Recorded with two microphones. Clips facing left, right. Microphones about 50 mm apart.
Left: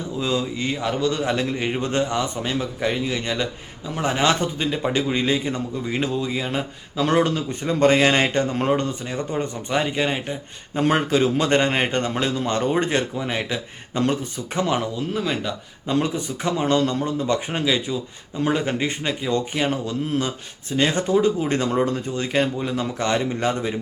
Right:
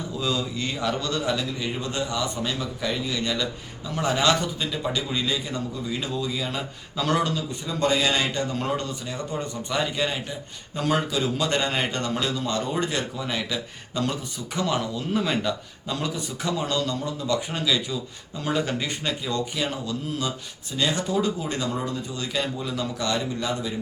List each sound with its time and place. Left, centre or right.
0.2 s a man's voice: left
15.1 s speech: centre
15.9 s a man's voice: left
20.7 s a man's voice: left
22.1 s a man's voice: left